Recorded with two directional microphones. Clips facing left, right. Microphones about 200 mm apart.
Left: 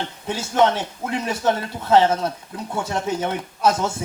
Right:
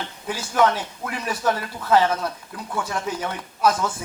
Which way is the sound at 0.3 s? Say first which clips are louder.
Left 2 dB; 25° left (ahead or behind).